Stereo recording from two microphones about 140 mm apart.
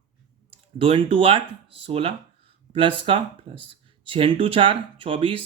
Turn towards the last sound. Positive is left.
turn(degrees=-40)  # may be behind; listen again after turning